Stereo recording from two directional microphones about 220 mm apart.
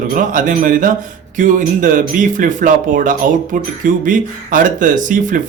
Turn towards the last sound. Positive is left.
turn(degrees=-35)  # may be behind; listen again after turning